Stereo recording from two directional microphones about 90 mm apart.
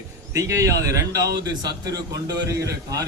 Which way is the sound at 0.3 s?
35° right (ahead or behind).